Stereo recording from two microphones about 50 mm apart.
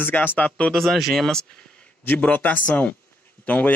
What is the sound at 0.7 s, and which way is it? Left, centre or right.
Speech, centre.